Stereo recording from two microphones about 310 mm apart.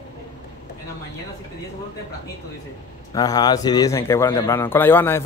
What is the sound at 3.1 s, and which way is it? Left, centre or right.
A man's voice, centre.